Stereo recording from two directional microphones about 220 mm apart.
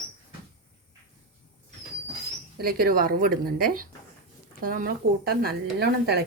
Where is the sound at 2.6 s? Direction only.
40° right (ahead or behind).